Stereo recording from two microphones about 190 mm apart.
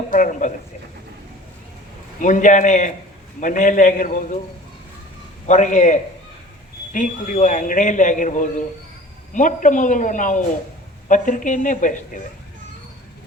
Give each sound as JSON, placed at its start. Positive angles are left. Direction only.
{"t": 0.1, "sound": "a woman's voice", "side_deg": 45}
{"t": 2.2, "sound": "a man's voice", "side_deg": 40}
{"t": 5.5, "sound": "a man's voice", "side_deg": 40}